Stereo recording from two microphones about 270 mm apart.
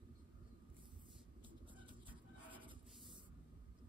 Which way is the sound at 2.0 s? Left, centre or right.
Centre.